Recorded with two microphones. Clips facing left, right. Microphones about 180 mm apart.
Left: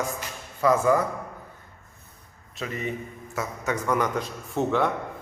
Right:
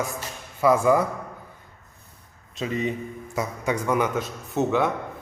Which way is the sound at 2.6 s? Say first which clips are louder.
Right 4 dB; 20° right (ahead or behind).